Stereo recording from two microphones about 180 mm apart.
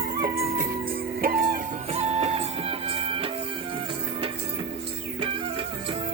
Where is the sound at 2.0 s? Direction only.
35° right (ahead or behind).